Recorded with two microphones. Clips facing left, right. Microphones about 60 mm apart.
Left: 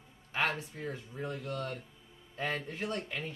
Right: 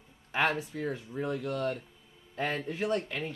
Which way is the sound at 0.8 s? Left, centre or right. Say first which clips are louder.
Right 5 dB; right.